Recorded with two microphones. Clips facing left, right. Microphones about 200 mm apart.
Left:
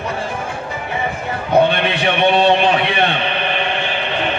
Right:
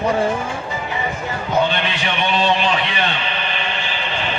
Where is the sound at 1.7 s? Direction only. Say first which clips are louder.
Left 5 dB; 60° left (ahead or behind).